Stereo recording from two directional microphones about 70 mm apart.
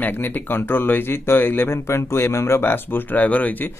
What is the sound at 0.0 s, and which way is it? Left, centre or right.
Speech, left.